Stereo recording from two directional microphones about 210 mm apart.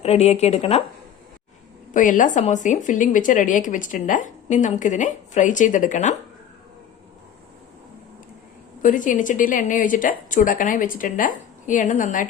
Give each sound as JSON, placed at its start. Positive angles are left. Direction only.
{"t": 0.0, "sound": "a woman's voice", "side_deg": 30}
{"t": 1.9, "sound": "a woman's voice", "side_deg": 40}
{"t": 8.8, "sound": "a woman's voice", "side_deg": 40}